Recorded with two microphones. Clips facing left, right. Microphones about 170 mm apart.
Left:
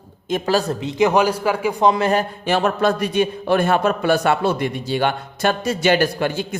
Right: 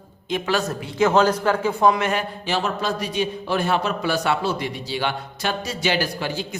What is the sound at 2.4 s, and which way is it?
A man's voice, 55° left (ahead or behind).